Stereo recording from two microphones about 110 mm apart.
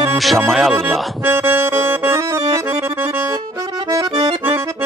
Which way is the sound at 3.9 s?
35° right (ahead or behind).